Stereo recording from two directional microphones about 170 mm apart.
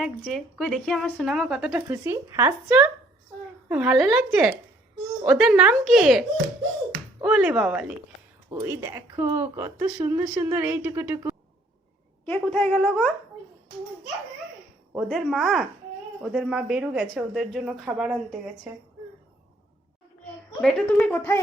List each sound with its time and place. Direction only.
0.0 s speech: centre (ahead or behind)
1.9 s speech: 15° right (ahead or behind)
8.4 s speech: 20° right (ahead or behind)
12.2 s a woman's voice: 10° left (ahead or behind)
14.9 s speech: centre (ahead or behind)
20.6 s a woman's voice: 5° left (ahead or behind)